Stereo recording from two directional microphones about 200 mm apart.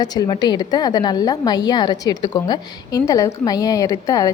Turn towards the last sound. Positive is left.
turn(degrees=15)  # may be behind; listen again after turning